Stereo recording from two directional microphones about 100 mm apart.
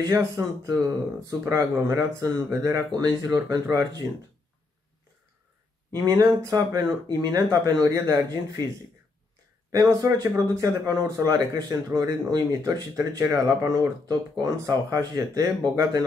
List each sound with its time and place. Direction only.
0.0 s speech: 35° right (ahead or behind)
5.9 s speech: 35° right (ahead or behind)
9.7 s speech: 30° right (ahead or behind)